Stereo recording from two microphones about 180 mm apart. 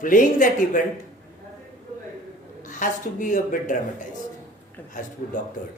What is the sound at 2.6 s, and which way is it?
Speech, 45° left (ahead or behind).